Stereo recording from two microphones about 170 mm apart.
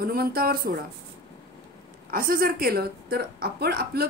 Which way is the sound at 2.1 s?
60° right (ahead or behind).